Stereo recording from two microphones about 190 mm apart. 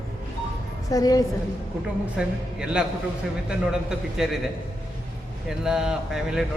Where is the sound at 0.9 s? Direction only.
20° left (ahead or behind).